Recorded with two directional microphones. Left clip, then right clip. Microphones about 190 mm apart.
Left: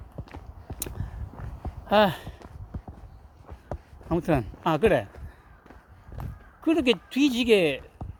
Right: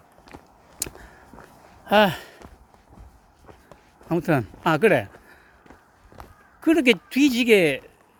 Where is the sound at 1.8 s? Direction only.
20° right (ahead or behind).